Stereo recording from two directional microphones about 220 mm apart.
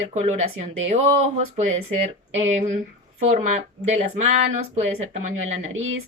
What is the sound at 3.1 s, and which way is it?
A woman's voice, 30° right (ahead or behind).